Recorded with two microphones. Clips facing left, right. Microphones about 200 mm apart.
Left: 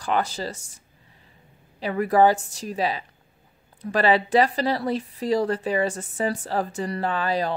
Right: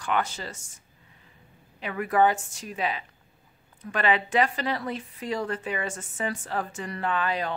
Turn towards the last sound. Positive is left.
turn(degrees=35)  # may be behind; listen again after turning